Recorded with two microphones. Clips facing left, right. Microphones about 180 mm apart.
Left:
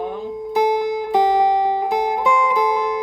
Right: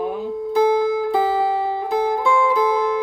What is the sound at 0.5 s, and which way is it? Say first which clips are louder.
Music: right 2 dB; 15° left (ahead or behind).